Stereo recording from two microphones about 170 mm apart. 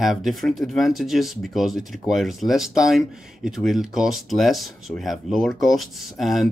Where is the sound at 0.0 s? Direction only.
Centre (ahead or behind).